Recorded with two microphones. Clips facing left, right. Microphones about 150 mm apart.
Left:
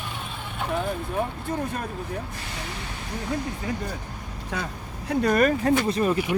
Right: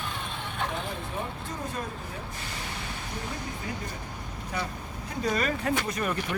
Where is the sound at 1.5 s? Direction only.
60° left (ahead or behind).